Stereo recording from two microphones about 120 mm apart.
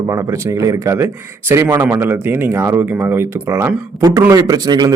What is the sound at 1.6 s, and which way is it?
A man's voice, 10° right (ahead or behind).